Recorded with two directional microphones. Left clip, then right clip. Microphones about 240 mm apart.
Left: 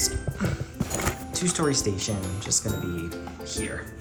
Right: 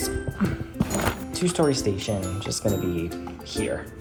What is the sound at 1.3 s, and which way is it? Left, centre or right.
Speech, centre.